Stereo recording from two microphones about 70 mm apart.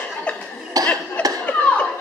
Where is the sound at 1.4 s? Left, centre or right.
Left.